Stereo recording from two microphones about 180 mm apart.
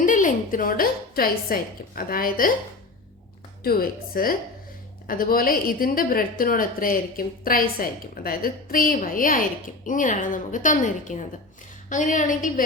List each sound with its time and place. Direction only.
0.0 s a woman's voice: 45° left (ahead or behind)
3.6 s a woman's voice: 55° left (ahead or behind)